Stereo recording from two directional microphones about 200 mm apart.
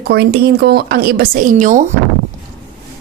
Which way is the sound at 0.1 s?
50° right (ahead or behind).